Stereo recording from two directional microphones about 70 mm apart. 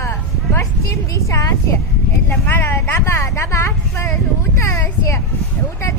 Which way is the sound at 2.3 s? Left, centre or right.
Left.